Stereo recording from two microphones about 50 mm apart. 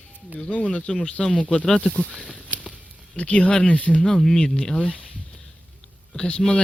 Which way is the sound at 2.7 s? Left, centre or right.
Right.